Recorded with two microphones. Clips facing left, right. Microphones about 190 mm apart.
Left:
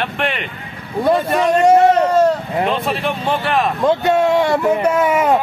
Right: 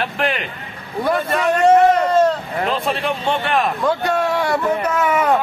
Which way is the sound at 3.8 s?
25° left (ahead or behind).